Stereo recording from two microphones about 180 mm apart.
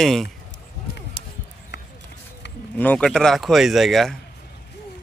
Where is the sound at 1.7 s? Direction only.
75° left (ahead or behind).